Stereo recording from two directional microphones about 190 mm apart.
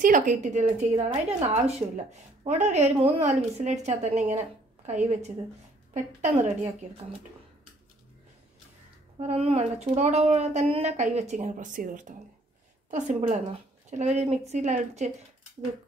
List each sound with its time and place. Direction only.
0.0 s speech: 40° right (ahead or behind)
9.2 s speech: 30° right (ahead or behind)